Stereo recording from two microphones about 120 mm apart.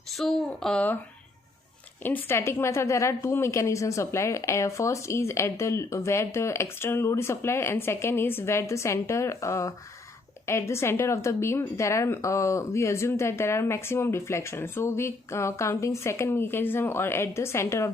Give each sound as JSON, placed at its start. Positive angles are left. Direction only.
{"t": 0.2, "sound": "speech", "side_deg": 5}
{"t": 2.0, "sound": "a woman's voice", "side_deg": 20}